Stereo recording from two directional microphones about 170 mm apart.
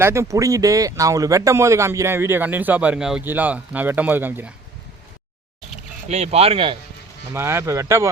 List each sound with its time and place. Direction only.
0.0 s speech: 15° right (ahead or behind)
6.1 s speech: 40° right (ahead or behind)
7.3 s speech: 15° right (ahead or behind)